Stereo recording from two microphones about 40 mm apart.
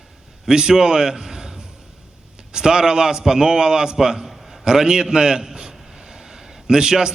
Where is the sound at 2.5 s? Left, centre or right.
Centre.